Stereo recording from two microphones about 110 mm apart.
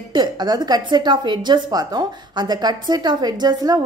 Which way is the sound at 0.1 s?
40° right (ahead or behind).